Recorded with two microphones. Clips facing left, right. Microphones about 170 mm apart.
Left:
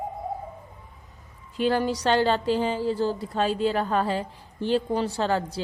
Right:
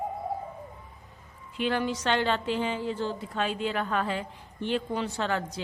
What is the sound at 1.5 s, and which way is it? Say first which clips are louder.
Speech: left 4 dB; 40° left (ahead or behind).